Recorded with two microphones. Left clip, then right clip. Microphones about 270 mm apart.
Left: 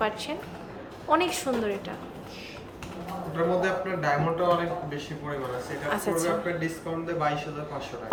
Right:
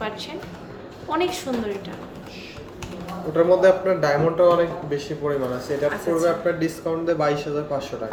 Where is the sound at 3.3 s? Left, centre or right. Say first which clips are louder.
Right 10 dB; right.